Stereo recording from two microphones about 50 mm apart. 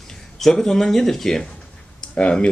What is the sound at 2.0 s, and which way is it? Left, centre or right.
Speech, centre.